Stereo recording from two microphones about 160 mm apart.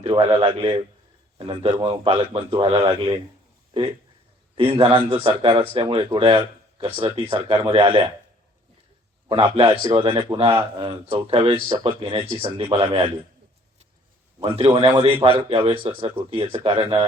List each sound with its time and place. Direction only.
0.0 s speech: 35° right (ahead or behind)
4.5 s speech: 35° right (ahead or behind)
9.3 s speech: 35° right (ahead or behind)
14.4 s speech: 40° right (ahead or behind)